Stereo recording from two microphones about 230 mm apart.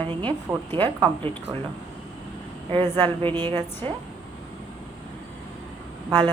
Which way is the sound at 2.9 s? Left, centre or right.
Right.